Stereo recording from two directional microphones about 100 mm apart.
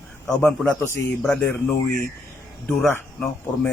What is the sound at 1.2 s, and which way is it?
Speech, 5° left (ahead or behind).